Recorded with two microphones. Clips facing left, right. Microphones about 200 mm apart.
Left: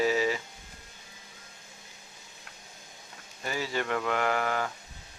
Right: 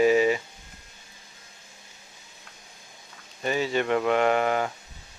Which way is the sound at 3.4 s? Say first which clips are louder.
Right 7 dB; 20° right (ahead or behind).